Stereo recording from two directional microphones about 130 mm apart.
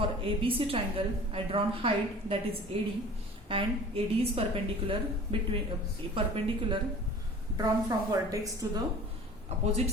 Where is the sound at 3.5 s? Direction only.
45° right (ahead or behind).